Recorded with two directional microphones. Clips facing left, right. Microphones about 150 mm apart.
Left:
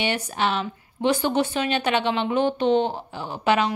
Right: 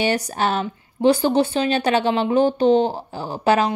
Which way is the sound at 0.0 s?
40° right (ahead or behind).